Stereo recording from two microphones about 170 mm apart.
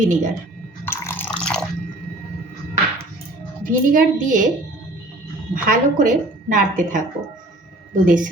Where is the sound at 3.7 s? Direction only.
55° right (ahead or behind).